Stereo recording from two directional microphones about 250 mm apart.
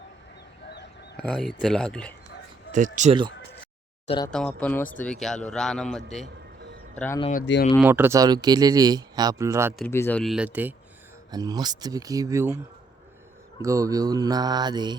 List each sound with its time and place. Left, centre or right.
1.1 s a man's voice: centre
2.7 s speech: right
4.0 s speech: left
4.3 s a man's voice: centre
7.2 s speech: left
7.4 s speech: left
7.8 s speech: centre
9.7 s a man's voice: centre
13.6 s speech: centre